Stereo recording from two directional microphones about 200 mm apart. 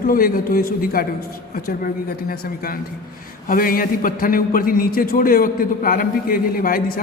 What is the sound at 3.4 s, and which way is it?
A man's voice, 45° left (ahead or behind).